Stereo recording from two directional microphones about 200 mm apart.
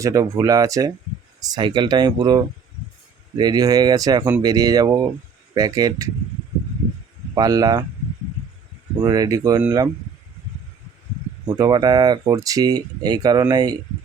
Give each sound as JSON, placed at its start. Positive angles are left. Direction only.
{"t": 0.0, "sound": "speech", "side_deg": -15}
{"t": 7.3, "sound": "speech", "side_deg": -20}
{"t": 9.0, "sound": "speech", "side_deg": -20}
{"t": 11.4, "sound": "speech", "side_deg": -20}